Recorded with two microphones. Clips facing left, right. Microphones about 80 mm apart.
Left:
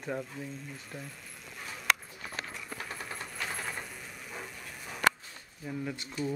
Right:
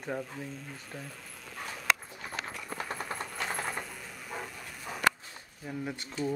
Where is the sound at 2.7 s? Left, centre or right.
Right.